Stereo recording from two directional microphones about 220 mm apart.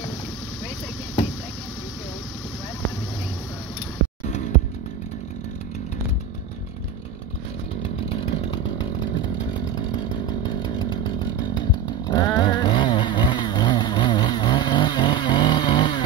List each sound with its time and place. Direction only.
4.3 s music: 30° left (ahead or behind)
7.8 s chainsaw: 20° left (ahead or behind)